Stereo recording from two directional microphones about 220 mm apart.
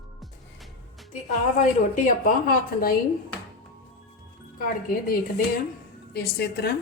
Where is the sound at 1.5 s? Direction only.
35° left (ahead or behind).